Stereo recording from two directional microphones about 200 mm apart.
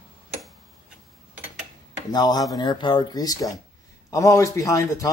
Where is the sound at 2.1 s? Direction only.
20° left (ahead or behind).